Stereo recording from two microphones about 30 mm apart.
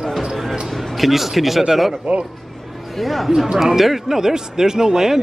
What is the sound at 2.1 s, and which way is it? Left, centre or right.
Speech, right.